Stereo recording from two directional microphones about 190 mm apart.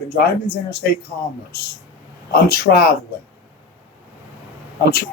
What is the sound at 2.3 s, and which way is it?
Speech, 55° left (ahead or behind).